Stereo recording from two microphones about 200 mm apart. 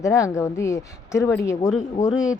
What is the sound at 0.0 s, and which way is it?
Speech, 15° left (ahead or behind).